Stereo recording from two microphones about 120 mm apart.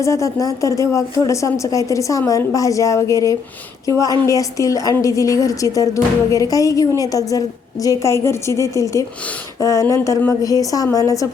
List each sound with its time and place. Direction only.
0.0 s speech: 25° left (ahead or behind)